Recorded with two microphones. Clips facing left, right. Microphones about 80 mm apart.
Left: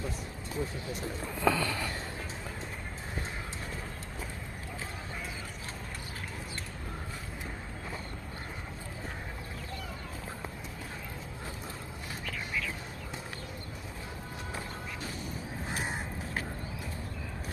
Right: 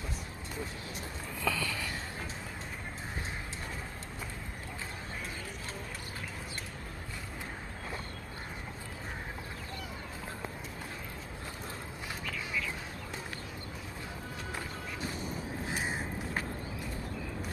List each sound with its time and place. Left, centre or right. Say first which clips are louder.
1.4 s sniff: left 5 dB; left